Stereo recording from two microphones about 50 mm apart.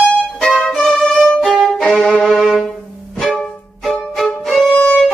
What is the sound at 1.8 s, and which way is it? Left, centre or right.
Violin, centre.